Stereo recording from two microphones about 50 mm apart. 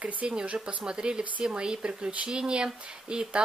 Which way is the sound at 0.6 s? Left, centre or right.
Centre.